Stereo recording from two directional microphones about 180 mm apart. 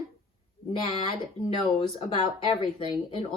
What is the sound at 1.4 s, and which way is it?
Speech, 30° left (ahead or behind).